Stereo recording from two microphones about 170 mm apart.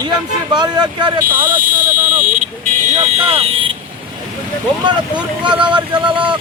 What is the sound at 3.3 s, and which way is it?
Speech, 30° right (ahead or behind).